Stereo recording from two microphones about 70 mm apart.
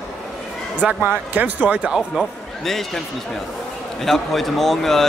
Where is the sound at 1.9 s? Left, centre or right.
Centre.